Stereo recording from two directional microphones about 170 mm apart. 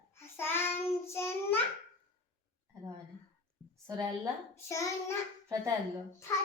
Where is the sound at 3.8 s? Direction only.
20° right (ahead or behind).